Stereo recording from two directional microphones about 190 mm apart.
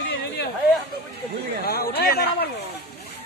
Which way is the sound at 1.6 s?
55° left (ahead or behind).